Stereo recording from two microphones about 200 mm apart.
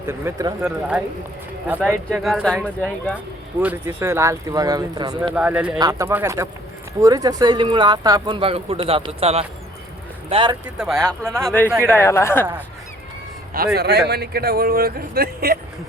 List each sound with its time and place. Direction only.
0.0 s speech: 15° right (ahead or behind)
2.0 s speech: centre (ahead or behind)
3.6 s speech: 10° right (ahead or behind)
5.3 s speech: 5° right (ahead or behind); by 10.6 s 25° right (ahead or behind)
10.8 s speech: centre (ahead or behind)
13.7 s speech: 55° right (ahead or behind)